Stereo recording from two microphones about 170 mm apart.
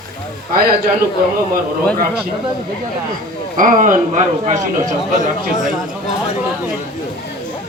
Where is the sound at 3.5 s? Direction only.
50° right (ahead or behind).